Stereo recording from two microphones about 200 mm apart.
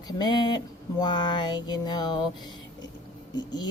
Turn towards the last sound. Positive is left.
turn(degrees=20)  # may be behind; listen again after turning